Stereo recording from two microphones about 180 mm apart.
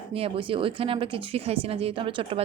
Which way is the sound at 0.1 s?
30° right (ahead or behind).